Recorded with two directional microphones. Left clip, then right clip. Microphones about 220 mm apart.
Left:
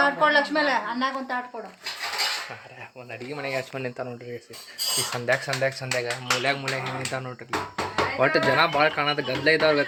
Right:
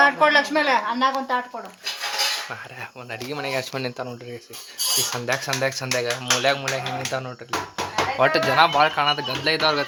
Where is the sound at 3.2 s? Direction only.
20° right (ahead or behind).